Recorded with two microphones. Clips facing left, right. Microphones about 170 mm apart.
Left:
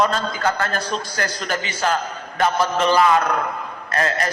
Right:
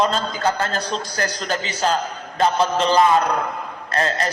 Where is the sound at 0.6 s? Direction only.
30° right (ahead or behind).